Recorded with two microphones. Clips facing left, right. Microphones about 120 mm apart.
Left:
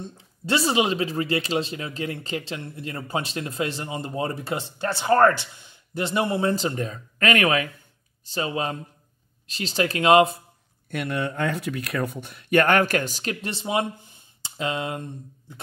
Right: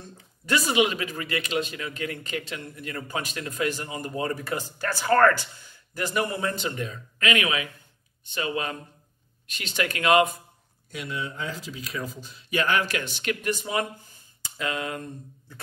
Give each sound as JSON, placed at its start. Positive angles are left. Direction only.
{"t": 0.0, "sound": "speech", "side_deg": 30}
{"t": 8.3, "sound": "speech", "side_deg": 30}
{"t": 10.9, "sound": "speech", "side_deg": 60}